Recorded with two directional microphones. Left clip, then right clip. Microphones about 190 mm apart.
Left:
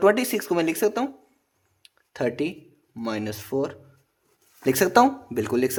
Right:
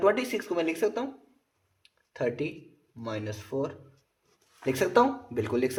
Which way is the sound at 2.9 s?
50° left (ahead or behind).